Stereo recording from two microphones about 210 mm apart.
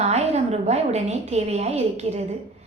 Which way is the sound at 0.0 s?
30° right (ahead or behind).